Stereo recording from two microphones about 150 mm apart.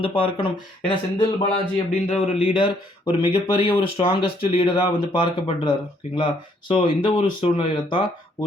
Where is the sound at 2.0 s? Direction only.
40° left (ahead or behind).